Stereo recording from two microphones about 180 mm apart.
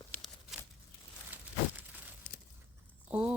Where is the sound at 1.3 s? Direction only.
10° right (ahead or behind).